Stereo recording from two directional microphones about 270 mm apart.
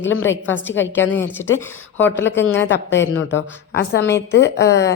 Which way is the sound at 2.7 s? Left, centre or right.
Left.